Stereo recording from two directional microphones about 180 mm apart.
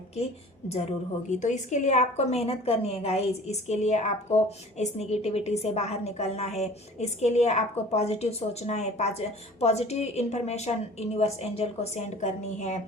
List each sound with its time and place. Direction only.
1.4 s a woman's voice: 40° left (ahead or behind)